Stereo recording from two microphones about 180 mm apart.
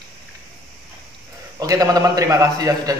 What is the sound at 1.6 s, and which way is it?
A man's voice, 20° right (ahead or behind).